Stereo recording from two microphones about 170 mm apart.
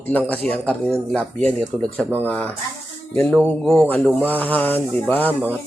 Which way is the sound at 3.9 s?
10° left (ahead or behind).